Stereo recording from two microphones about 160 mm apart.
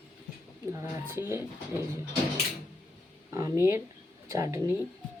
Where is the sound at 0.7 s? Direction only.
15° right (ahead or behind).